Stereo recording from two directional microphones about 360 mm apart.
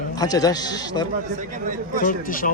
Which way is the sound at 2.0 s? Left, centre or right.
Left.